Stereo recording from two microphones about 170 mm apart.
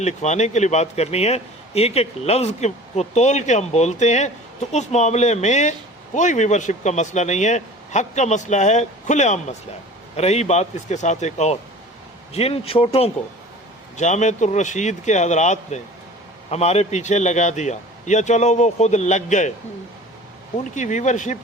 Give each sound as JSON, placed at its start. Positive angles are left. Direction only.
{"t": 0.0, "sound": "a man's voice", "side_deg": 40}
{"t": 13.9, "sound": "a man's voice", "side_deg": 45}
{"t": 20.7, "sound": "a man's voice", "side_deg": 45}